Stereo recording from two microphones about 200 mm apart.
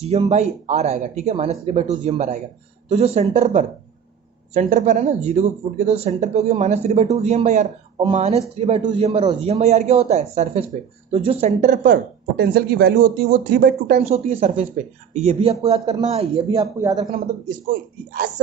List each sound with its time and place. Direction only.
0.0 s speech: 30° right (ahead or behind)
4.7 s speech: 40° right (ahead or behind)
14.1 s speech: 30° right (ahead or behind)
15.6 s speech: 20° right (ahead or behind)
16.0 s speech: 30° right (ahead or behind)